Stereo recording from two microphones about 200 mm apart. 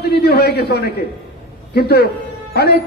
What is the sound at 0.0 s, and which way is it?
A man's voice, 55° left (ahead or behind).